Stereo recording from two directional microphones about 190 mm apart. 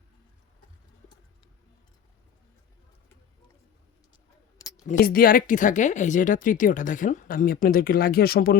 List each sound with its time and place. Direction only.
4.9 s speech: 50° left (ahead or behind)